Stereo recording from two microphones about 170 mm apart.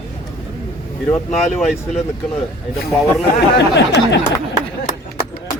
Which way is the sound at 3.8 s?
90° left.